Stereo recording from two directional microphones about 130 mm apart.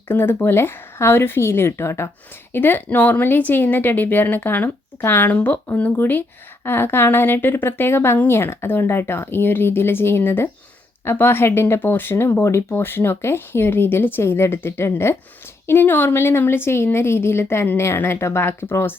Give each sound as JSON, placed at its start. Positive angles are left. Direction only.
{"t": 0.1, "sound": "speech", "side_deg": 15}